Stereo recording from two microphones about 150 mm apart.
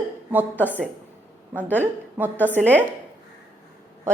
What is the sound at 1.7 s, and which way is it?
A woman's voice, 15° right (ahead or behind).